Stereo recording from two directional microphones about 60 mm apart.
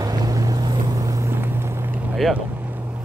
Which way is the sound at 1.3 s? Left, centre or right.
Right.